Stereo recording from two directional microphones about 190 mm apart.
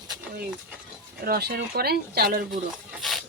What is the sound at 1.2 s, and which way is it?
Speech, 55° right (ahead or behind).